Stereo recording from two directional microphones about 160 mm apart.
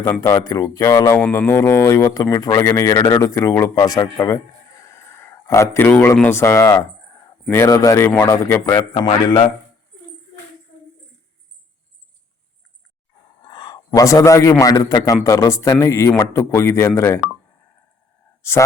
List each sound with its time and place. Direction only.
0.0 s a man's voice: 25° left (ahead or behind)
4.8 s a sound: 15° left (ahead or behind)
6.2 s a man's voice: 15° left (ahead or behind)
13.5 s a man's voice: 30° left (ahead or behind)
18.4 s speech: 15° left (ahead or behind)